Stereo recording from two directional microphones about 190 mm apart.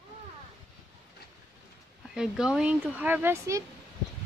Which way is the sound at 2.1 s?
5° right (ahead or behind).